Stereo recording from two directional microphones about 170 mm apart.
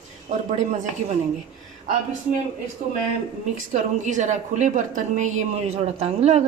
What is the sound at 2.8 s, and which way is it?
A woman's voice, 50° right (ahead or behind).